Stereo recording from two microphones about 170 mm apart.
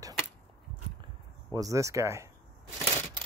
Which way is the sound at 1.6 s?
20° right (ahead or behind).